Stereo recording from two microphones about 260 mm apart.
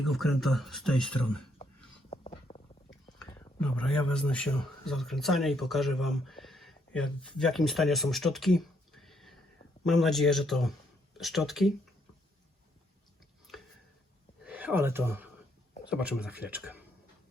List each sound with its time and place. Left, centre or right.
0.0 s speech: centre
2.0 s a sound: left
3.3 s a man's voice: centre
14.4 s speech: centre